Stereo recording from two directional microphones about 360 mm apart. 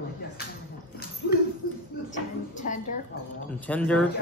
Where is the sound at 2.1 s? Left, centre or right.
Left.